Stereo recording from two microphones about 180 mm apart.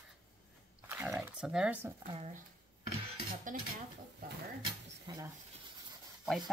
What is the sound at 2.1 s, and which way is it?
Speech, 35° right (ahead or behind).